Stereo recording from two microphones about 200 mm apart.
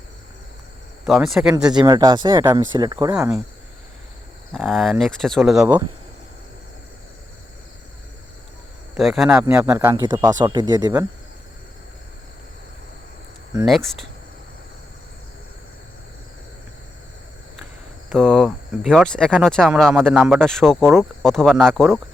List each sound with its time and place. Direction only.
1.0 s speech: centre (ahead or behind)
1.7 s speech: 20° right (ahead or behind)
4.5 s speech: centre (ahead or behind)
9.0 s speech: centre (ahead or behind); by 11.0 s 20° right (ahead or behind)
13.7 s speech: centre (ahead or behind)
18.1 s speech: centre (ahead or behind)